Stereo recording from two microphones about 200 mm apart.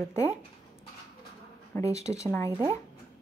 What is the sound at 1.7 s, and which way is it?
Speech, 15° left (ahead or behind).